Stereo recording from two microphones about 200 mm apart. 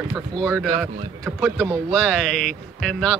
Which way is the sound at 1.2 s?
10° right (ahead or behind).